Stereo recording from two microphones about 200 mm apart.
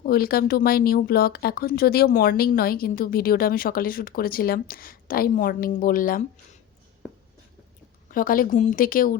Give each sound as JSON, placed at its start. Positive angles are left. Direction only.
{"t": 0.0, "sound": "speech", "side_deg": 50}
{"t": 8.1, "sound": "speech", "side_deg": 45}